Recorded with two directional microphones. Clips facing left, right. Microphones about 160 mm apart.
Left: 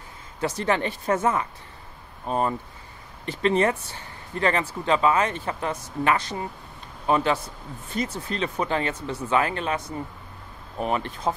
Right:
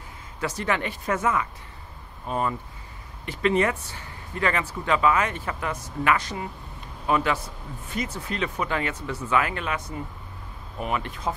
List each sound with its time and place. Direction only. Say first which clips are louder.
0.4 s speech: left 3 dB; 30° left (ahead or behind)
10.8 s speech: left 3 dB; 35° left (ahead or behind)